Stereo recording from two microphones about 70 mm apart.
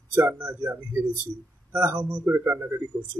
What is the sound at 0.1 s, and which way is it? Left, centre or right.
Speech, right.